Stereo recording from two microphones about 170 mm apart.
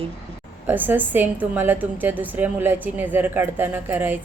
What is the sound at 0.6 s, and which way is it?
A woman's voice, 10° right (ahead or behind).